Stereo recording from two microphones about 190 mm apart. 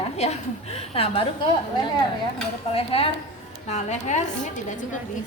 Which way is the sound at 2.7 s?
30° left (ahead or behind).